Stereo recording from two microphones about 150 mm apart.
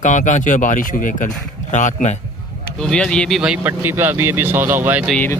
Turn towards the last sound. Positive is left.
turn(degrees=-10)  # may be behind; listen again after turning